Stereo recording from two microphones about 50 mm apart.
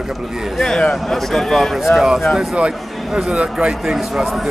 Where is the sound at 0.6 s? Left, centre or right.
Centre.